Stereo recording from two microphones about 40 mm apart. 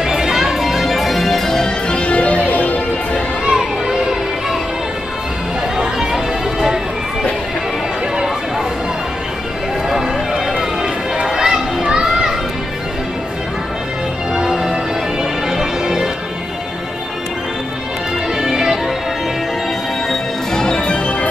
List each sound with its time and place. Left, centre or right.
0.0 s music: centre
1.9 s music: left
3.5 s music: centre
5.8 s music: centre
10.6 s children playing: centre
14.3 s music: centre
18.4 s music: centre
20.1 s music: centre